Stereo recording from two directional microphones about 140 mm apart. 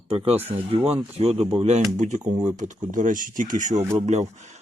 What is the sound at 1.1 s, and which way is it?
Speech, 50° right (ahead or behind).